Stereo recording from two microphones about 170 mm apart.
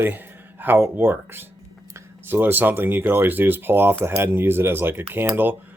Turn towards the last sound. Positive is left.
turn(degrees=-10)  # may be behind; listen again after turning